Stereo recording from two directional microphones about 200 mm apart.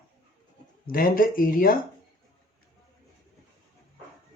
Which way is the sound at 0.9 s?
45° left (ahead or behind).